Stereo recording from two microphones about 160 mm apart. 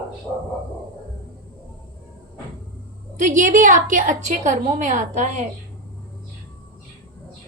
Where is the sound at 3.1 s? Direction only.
50° right (ahead or behind).